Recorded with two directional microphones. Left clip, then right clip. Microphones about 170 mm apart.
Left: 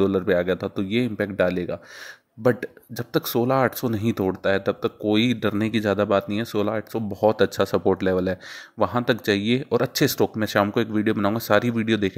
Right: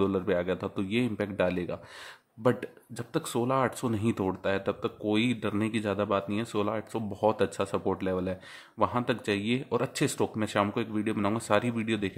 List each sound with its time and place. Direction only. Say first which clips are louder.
0.0 s speech: left 7 dB; 20° left (ahead or behind)